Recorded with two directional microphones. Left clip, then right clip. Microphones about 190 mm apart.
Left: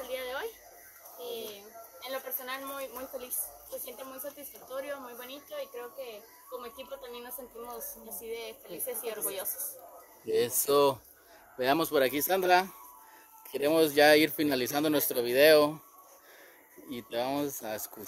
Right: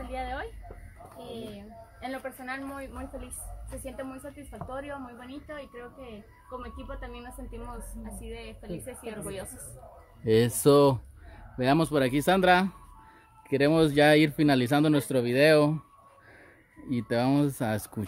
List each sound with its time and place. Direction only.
0.1 s a sound: centre (ahead or behind)
2.0 s a woman's voice: centre (ahead or behind)
8.4 s speech: centre (ahead or behind)
16.9 s speech: 15° right (ahead or behind)